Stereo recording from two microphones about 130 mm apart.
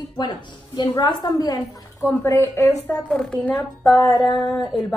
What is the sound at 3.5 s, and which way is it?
Speech, 25° left (ahead or behind).